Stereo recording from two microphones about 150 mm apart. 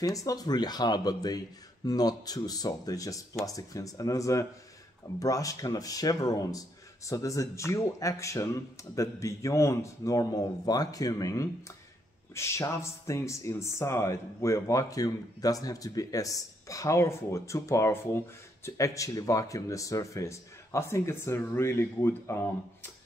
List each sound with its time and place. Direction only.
0.0 s speech: 25° left (ahead or behind)